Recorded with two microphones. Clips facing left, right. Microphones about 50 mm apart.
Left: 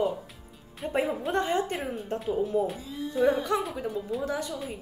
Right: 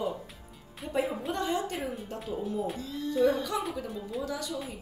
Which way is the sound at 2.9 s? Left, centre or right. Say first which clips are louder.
Right 1 dB; centre.